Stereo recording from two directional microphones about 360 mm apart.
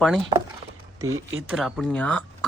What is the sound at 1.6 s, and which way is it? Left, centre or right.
Speech, centre.